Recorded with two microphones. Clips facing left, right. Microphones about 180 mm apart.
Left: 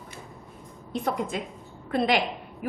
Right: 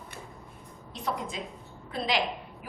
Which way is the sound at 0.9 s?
55° left (ahead or behind).